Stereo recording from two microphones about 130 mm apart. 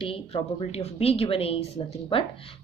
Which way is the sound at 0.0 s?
45° left (ahead or behind).